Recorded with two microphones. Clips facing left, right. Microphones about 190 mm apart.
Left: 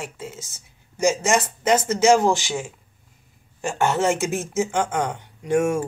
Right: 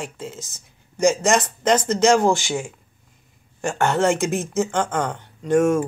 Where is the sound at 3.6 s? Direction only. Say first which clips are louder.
Right 2 dB; 5° left (ahead or behind).